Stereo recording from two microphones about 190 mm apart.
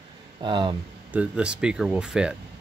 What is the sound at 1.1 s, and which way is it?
Speech, 5° right (ahead or behind).